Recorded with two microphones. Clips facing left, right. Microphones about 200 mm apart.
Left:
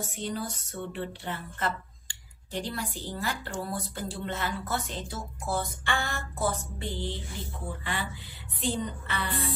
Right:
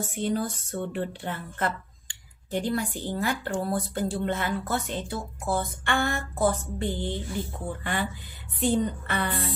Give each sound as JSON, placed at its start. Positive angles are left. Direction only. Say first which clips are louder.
{"t": 0.1, "sound": "a woman's voice", "louder": "right 6 dB", "side_deg": -50}